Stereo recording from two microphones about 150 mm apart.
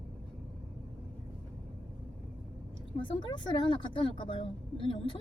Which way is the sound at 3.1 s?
30° left (ahead or behind).